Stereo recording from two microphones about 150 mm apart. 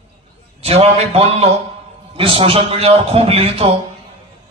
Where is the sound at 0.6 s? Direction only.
40° right (ahead or behind).